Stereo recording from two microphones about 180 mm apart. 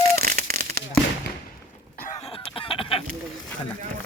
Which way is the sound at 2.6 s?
30° left (ahead or behind).